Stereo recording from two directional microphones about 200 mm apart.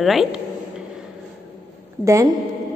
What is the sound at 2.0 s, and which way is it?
Speech, 15° right (ahead or behind).